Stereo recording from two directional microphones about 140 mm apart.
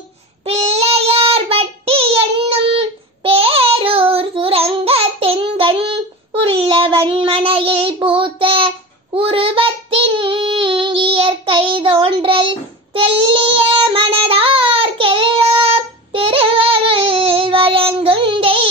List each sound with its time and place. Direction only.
0.5 s child singing: 50° right (ahead or behind)